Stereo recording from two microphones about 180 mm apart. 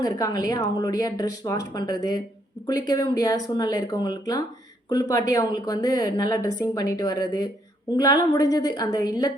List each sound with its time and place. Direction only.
0.0 s a woman's voice: 20° left (ahead or behind)